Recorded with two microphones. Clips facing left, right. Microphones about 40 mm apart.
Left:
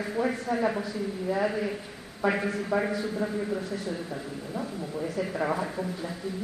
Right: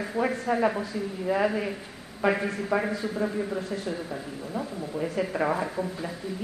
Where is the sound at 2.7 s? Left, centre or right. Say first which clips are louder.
Right 1 dB; right.